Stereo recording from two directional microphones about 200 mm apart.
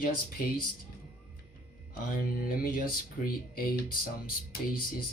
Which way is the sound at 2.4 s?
45° left (ahead or behind).